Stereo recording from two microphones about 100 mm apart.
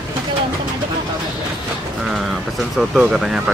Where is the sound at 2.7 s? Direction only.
5° right (ahead or behind).